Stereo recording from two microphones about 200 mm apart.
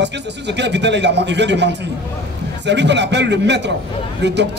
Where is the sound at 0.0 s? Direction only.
60° right (ahead or behind).